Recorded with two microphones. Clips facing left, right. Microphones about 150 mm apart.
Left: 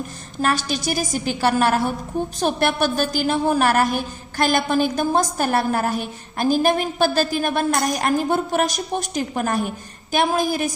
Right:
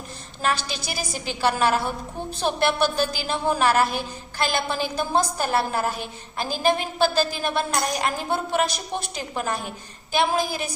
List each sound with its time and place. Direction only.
0.4 s a woman's voice: 50° left (ahead or behind)